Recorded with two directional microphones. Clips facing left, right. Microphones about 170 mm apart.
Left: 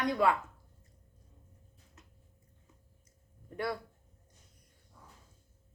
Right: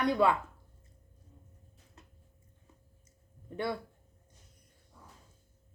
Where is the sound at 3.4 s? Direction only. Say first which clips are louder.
Right 1 dB; 25° right (ahead or behind).